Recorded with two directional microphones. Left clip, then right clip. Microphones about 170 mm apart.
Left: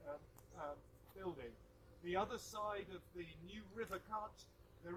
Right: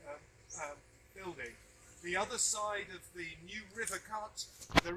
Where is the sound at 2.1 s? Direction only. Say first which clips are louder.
Right 6 dB; 15° right (ahead or behind).